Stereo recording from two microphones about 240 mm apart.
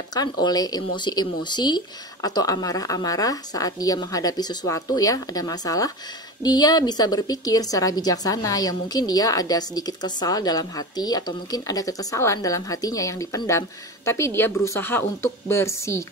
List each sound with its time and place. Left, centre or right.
0.1 s a woman's voice: centre